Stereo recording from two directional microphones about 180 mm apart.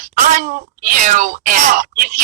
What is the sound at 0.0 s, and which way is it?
Speech, 45° right (ahead or behind).